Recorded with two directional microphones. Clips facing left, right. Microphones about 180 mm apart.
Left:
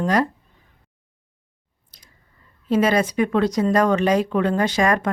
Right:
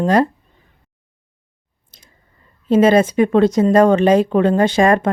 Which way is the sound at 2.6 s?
25° right (ahead or behind).